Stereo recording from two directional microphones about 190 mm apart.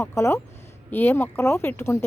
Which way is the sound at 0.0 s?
15° left (ahead or behind).